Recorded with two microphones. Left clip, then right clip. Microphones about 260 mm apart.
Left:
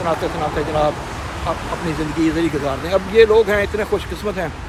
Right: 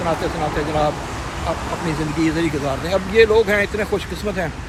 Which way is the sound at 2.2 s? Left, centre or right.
Centre.